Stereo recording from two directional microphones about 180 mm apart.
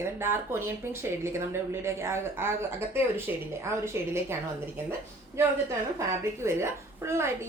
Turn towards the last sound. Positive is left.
turn(degrees=-15)  # may be behind; listen again after turning